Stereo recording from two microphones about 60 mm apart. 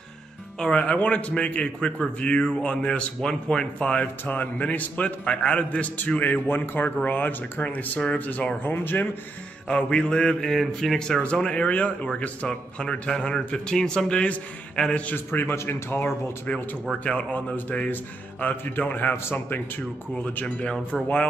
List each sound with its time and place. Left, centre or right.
0.6 s a man's voice: centre; by 9.1 s left
9.7 s a man's voice: centre
11.3 s a man's voice: centre
15.1 s speech: left
17.0 s speech: left
17.6 s speech: left
19.1 s speech: left
20.3 s speech: left
20.9 s speech: centre